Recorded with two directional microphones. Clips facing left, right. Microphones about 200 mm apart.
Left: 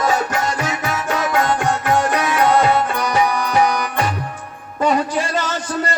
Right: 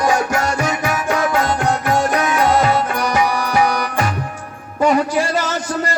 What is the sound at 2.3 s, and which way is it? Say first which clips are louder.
Tabla: left 2 dB; 10° right (ahead or behind).